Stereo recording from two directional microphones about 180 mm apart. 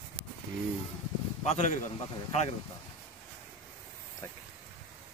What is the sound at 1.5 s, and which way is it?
Speech, 40° left (ahead or behind).